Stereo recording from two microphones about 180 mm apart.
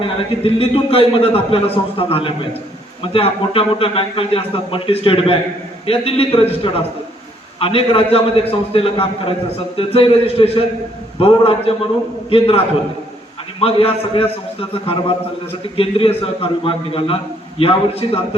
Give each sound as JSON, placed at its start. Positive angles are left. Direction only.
{"t": 0.0, "sound": "a man's voice", "side_deg": 30}